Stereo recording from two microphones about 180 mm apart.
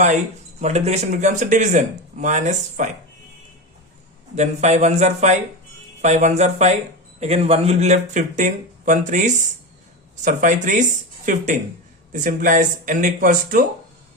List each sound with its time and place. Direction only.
0.6 s speech: 40° right (ahead or behind)
4.4 s speech: 40° right (ahead or behind)